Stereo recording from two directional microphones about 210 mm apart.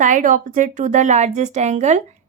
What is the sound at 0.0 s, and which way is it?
A woman's voice, 35° right (ahead or behind).